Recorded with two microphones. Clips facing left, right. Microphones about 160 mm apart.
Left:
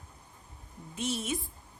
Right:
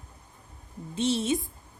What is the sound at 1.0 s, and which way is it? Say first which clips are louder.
Speech: right 7 dB; 30° right (ahead or behind).